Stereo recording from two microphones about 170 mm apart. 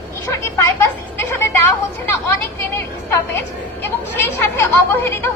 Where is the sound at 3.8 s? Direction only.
15° left (ahead or behind).